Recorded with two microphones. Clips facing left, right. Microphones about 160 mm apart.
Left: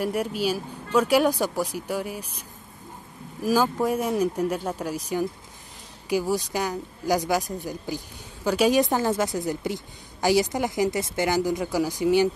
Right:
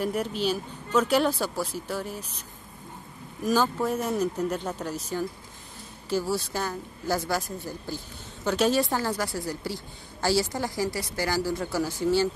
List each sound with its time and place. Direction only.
0.0 s speech: 10° left (ahead or behind)
3.4 s speech: 10° left (ahead or behind)